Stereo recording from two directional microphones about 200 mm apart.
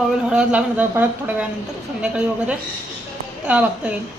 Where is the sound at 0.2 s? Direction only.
5° right (ahead or behind).